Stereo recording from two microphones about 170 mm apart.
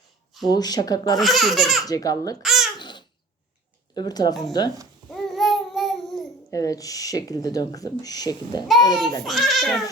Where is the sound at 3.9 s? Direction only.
25° left (ahead or behind).